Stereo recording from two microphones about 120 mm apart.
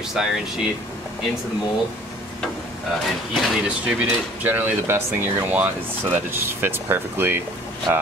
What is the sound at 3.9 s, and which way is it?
Speech, 15° right (ahead or behind).